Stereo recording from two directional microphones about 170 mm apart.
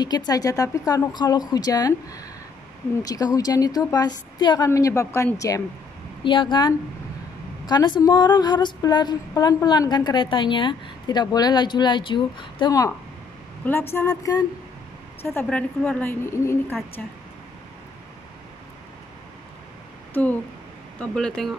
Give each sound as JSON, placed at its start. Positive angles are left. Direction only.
{"t": 0.3, "sound": "a woman's voice", "side_deg": 20}
{"t": 6.2, "sound": "speech", "side_deg": 30}
{"t": 13.9, "sound": "a woman's voice", "side_deg": 20}
{"t": 20.2, "sound": "a woman's voice", "side_deg": 10}